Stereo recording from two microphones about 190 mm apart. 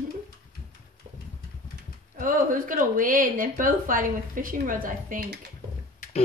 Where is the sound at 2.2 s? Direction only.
45° right (ahead or behind).